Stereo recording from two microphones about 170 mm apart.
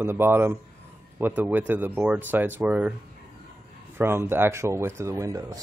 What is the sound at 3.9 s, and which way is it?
Speech, 15° right (ahead or behind).